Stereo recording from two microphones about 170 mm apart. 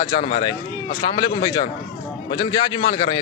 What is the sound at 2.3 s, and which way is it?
Speech, 25° left (ahead or behind).